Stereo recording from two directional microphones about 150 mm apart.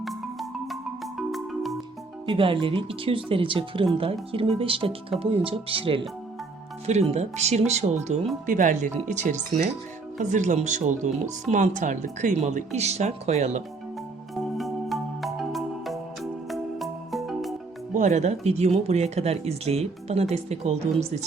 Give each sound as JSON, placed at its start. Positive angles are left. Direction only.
{"t": 0.0, "sound": "music", "side_deg": 0}
{"t": 2.2, "sound": "speech", "side_deg": -35}
{"t": 14.6, "sound": "music", "side_deg": 0}
{"t": 17.9, "sound": "speech", "side_deg": -50}